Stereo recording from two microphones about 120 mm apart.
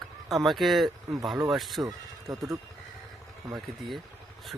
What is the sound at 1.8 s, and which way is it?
Speech, 30° right (ahead or behind).